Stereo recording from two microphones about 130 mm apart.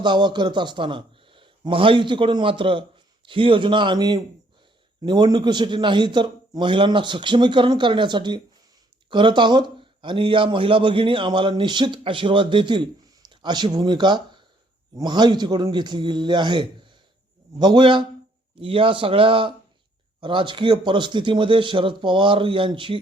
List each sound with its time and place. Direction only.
0.0 s a man's voice: 35° right (ahead or behind)